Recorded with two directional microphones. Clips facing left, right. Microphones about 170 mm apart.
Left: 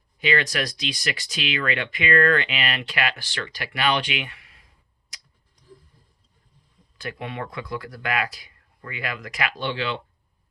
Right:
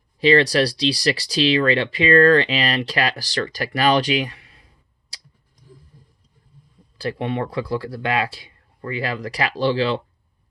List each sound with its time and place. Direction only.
0.2 s speech: 35° right (ahead or behind)
5.1 s a sound: 30° right (ahead or behind)
7.0 s speech: 30° right (ahead or behind)